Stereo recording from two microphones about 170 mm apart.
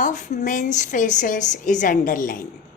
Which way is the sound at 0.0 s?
50° left (ahead or behind).